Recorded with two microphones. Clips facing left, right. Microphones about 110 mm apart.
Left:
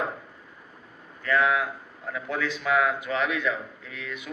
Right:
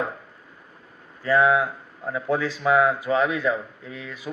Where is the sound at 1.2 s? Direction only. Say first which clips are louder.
Right 5 dB; 30° right (ahead or behind).